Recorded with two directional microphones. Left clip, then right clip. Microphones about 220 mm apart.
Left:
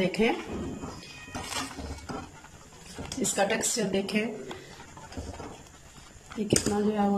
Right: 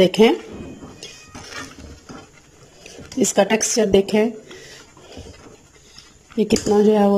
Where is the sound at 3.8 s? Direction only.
40° right (ahead or behind).